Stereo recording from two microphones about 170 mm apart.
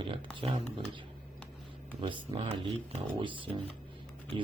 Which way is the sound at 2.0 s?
30° right (ahead or behind).